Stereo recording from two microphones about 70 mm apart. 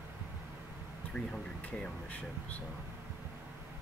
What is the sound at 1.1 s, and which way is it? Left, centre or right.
Speech, centre.